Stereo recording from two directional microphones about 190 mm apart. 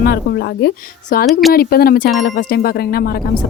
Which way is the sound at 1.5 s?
55° left (ahead or behind).